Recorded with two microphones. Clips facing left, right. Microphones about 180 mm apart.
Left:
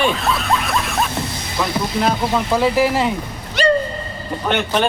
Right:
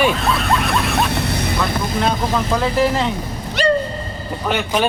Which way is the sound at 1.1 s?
65° right (ahead or behind).